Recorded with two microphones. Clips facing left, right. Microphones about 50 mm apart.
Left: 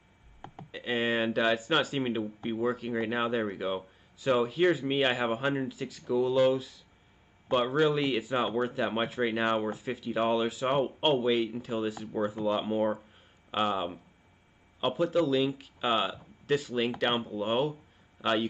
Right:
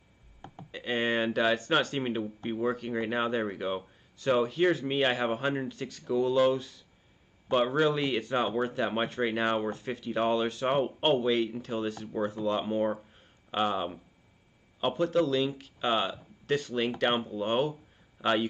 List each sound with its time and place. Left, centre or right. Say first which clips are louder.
0.7 s a man's voice: even; centre